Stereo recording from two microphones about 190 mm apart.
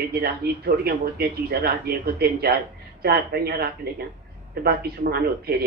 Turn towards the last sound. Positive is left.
turn(degrees=-55)  # may be behind; listen again after turning